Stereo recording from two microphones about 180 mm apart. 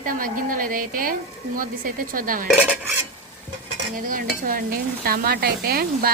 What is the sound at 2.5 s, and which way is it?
Dishes, 5° right (ahead or behind).